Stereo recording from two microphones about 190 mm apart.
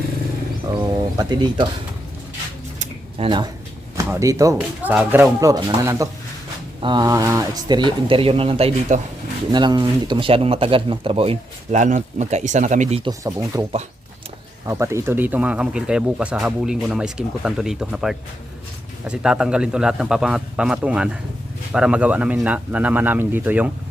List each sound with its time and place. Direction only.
0.7 s speech: 20° right (ahead or behind)
2.7 s a sound: 40° right (ahead or behind)
3.2 s speech: 25° right (ahead or behind)
7.9 s speech: 30° right (ahead or behind)
13.1 s speech: 15° right (ahead or behind)
14.7 s speech: 15° right (ahead or behind)